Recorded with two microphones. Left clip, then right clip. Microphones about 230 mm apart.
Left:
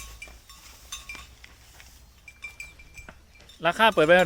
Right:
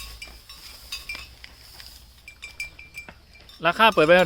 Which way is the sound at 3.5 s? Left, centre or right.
Centre.